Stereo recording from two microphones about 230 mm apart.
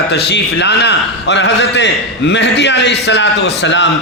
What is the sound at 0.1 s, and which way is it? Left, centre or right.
A man's voice, left.